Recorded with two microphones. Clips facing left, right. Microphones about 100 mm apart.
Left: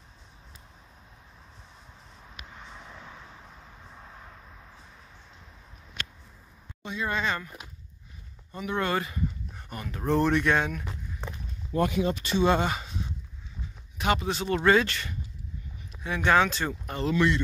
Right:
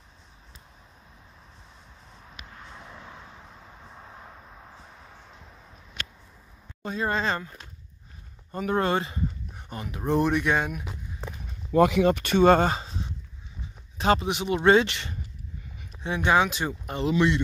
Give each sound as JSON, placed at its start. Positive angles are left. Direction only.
{"t": 6.8, "sound": "speech", "side_deg": -40}
{"t": 8.5, "sound": "speech", "side_deg": -40}
{"t": 8.8, "sound": "speech", "side_deg": -30}
{"t": 9.5, "sound": "a sound", "side_deg": -20}
{"t": 9.8, "sound": "speech", "side_deg": -15}
{"t": 11.7, "sound": "speech", "side_deg": -90}
{"t": 12.7, "sound": "a sound", "side_deg": -30}
{"t": 13.9, "sound": "speech", "side_deg": -35}
{"t": 14.2, "sound": "speech", "side_deg": -15}
{"t": 15.9, "sound": "a sound", "side_deg": -5}
{"t": 16.3, "sound": "speech", "side_deg": -15}